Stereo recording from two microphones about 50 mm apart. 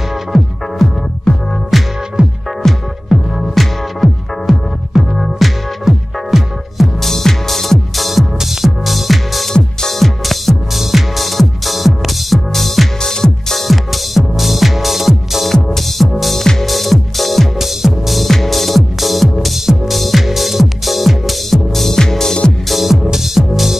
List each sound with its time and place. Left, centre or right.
0.3 s music: centre
2.2 s music: centre
2.6 s music: centre
22.7 s music: centre